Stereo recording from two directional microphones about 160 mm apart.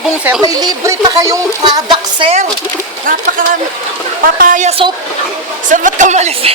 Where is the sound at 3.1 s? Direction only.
60° right (ahead or behind).